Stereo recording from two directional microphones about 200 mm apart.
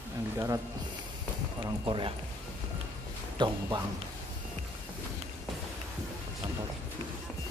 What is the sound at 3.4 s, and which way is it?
Speech, 25° right (ahead or behind).